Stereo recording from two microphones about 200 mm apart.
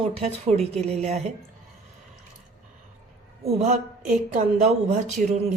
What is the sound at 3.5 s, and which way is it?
A woman's voice, 40° right (ahead or behind).